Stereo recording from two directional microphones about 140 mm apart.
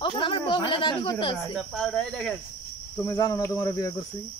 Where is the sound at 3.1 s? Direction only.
25° left (ahead or behind).